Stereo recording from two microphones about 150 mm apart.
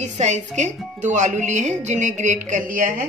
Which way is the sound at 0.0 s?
50° right (ahead or behind).